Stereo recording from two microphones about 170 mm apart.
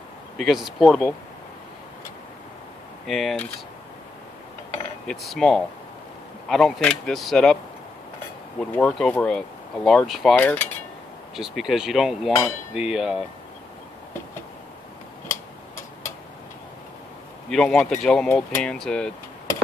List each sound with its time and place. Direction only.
0.4 s speech: centre (ahead or behind)
3.1 s speech: centre (ahead or behind)
5.0 s speech: centre (ahead or behind)
8.5 s speech: 5° left (ahead or behind)
11.3 s speech: 5° right (ahead or behind)
12.3 s hammer: 15° left (ahead or behind)
12.7 s speech: 5° right (ahead or behind)
17.5 s speech: 5° left (ahead or behind)